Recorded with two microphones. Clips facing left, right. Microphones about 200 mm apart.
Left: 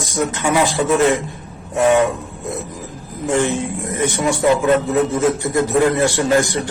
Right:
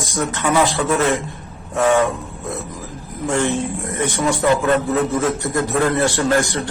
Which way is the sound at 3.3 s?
15° left (ahead or behind).